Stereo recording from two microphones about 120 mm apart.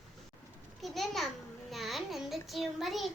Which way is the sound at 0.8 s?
Centre (ahead or behind).